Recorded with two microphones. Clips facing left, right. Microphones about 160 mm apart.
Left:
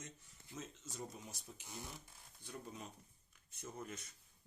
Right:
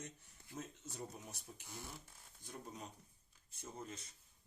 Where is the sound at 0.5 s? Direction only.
60° right (ahead or behind).